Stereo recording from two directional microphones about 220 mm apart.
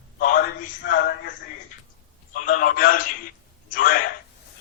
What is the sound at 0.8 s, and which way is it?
Speech, 50° left (ahead or behind).